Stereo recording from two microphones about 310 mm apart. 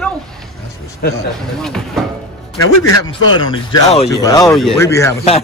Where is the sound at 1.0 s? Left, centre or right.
Left.